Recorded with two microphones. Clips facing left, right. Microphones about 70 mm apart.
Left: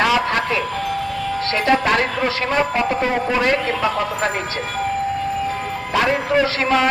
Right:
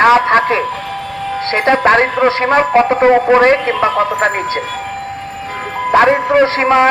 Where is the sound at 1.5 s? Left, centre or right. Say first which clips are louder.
Right 7 dB; right.